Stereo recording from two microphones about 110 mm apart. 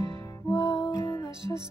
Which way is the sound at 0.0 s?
30° left (ahead or behind).